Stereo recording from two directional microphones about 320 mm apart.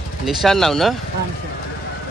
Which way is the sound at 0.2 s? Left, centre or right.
Centre.